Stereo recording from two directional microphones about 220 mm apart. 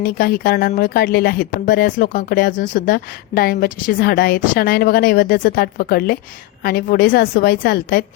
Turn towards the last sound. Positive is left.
turn(degrees=45)  # may be behind; listen again after turning